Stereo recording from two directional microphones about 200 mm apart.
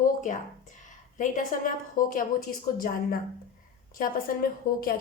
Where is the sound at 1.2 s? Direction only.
40° left (ahead or behind).